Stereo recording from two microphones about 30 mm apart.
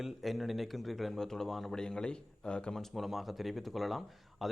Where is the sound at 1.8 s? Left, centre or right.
Left.